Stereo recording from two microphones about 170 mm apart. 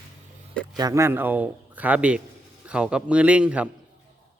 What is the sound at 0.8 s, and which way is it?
A man's voice, 20° right (ahead or behind).